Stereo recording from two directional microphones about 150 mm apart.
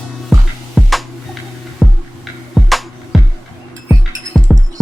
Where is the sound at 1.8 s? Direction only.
5° left (ahead or behind).